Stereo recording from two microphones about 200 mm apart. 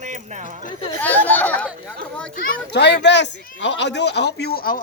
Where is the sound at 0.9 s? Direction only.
10° left (ahead or behind).